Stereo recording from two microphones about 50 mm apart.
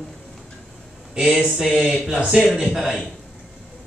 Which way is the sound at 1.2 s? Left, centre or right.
Centre.